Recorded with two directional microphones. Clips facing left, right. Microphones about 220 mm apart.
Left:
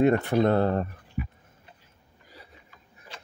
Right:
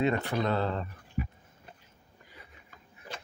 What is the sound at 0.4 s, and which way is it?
Speech, 55° left (ahead or behind).